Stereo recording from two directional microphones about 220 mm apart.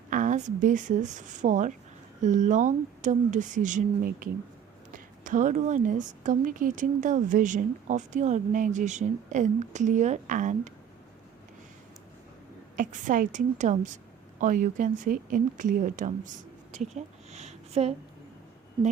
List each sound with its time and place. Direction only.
0.1 s a woman's voice: 35° right (ahead or behind)
12.7 s a woman's voice: 35° right (ahead or behind)